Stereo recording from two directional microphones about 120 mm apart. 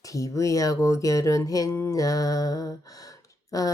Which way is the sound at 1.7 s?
25° left (ahead or behind).